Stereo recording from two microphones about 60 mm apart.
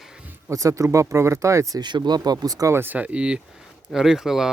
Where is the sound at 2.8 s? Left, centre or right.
Right.